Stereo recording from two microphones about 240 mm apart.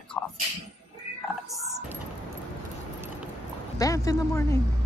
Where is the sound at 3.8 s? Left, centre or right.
Centre.